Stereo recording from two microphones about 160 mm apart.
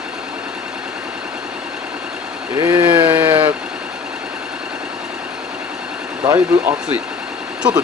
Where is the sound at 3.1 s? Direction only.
10° right (ahead or behind).